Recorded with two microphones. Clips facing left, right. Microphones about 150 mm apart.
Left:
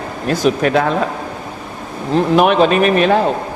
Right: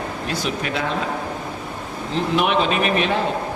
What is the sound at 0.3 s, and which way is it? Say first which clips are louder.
Speech: left 12 dB; 45° left (ahead or behind).